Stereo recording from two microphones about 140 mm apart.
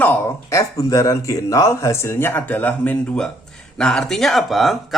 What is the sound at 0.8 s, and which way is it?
Speech, 25° left (ahead or behind).